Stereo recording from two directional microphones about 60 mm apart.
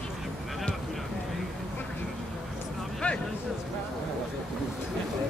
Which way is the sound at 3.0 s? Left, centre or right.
Left.